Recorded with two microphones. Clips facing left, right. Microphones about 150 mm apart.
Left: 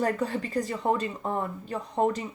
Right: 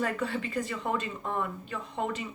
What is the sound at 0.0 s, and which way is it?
Speech, 40° left (ahead or behind).